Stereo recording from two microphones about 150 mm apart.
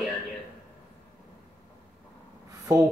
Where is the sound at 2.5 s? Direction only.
25° right (ahead or behind).